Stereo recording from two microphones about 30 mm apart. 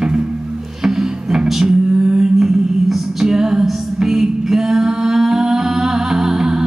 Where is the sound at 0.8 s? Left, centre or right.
Centre.